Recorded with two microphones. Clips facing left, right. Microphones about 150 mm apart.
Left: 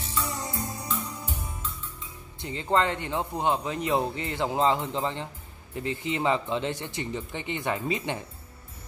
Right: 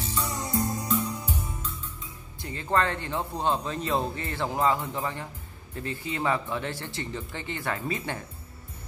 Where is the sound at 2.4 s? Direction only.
20° left (ahead or behind).